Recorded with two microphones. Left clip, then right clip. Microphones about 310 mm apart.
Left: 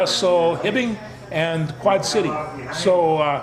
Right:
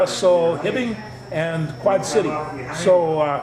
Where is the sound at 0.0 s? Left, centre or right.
Left.